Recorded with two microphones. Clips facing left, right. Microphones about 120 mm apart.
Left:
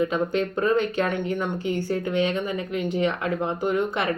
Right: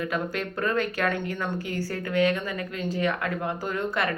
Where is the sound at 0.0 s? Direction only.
20° left (ahead or behind).